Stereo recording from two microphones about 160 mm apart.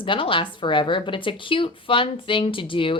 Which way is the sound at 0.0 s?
30° left (ahead or behind).